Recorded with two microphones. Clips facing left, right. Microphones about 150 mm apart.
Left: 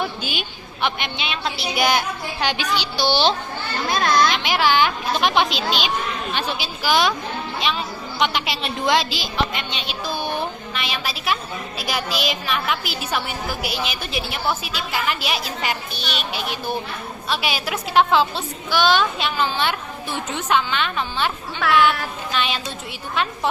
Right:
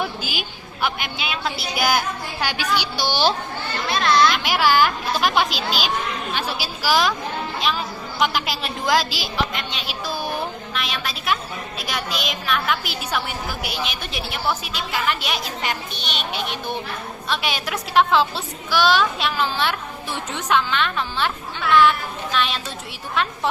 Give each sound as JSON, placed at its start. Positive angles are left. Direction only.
{"t": 0.2, "sound": "a woman's voice", "side_deg": -5}
{"t": 3.8, "sound": "children playing", "side_deg": 45}
{"t": 4.4, "sound": "a woman's voice", "side_deg": -5}